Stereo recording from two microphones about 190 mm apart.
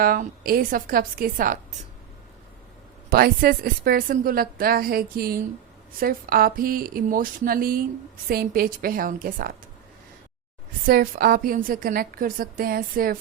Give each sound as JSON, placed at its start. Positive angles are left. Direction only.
{"t": 0.0, "sound": "a woman's voice", "side_deg": -50}
{"t": 3.1, "sound": "a woman's voice", "side_deg": -50}
{"t": 10.8, "sound": "a woman's voice", "side_deg": -50}